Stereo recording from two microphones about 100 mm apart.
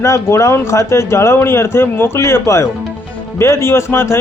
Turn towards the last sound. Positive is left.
turn(degrees=25)  # may be behind; listen again after turning